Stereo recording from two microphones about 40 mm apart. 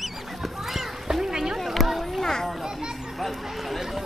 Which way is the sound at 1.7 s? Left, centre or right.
Centre.